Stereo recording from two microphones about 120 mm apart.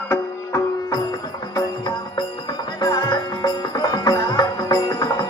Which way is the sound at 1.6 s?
40° left (ahead or behind).